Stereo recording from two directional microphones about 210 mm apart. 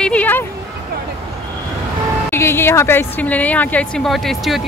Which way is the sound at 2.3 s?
10° left (ahead or behind).